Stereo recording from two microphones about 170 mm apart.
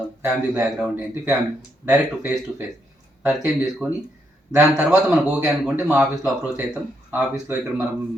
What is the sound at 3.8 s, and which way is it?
Speech, 5° right (ahead or behind).